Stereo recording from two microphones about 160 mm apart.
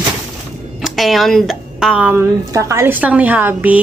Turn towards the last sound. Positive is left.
turn(degrees=-10)  # may be behind; listen again after turning